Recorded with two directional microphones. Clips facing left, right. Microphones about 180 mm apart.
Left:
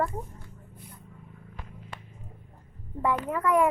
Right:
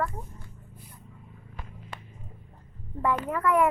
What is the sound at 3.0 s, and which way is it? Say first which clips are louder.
Speech: even; 15° left (ahead or behind).